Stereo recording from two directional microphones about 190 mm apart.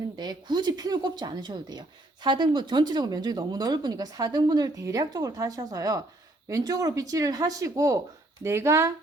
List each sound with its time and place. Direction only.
0.2 s speech: 20° right (ahead or behind)